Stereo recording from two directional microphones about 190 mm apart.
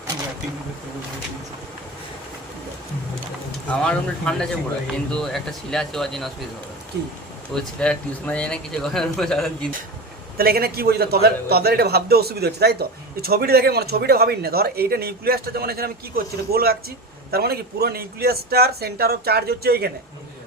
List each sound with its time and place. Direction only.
3.7 s speech: 5° left (ahead or behind)
7.5 s speech: 5° left (ahead or behind)
10.3 s a man's voice: 55° right (ahead or behind)